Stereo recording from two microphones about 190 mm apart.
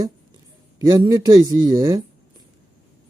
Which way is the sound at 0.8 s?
20° right (ahead or behind).